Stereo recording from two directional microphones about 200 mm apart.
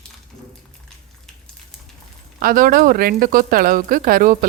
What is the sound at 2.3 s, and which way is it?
Speech, 45° right (ahead or behind).